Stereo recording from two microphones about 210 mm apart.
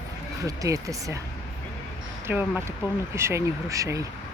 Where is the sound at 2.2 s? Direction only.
10° right (ahead or behind).